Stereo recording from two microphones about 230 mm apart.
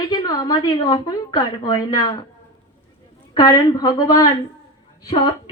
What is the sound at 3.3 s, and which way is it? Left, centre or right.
Speech, centre.